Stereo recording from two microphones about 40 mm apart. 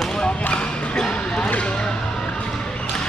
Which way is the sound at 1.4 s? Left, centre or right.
Left.